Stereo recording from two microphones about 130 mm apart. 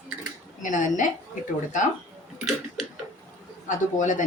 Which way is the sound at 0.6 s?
75° left (ahead or behind).